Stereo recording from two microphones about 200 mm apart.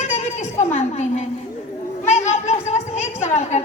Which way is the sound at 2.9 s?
35° left (ahead or behind).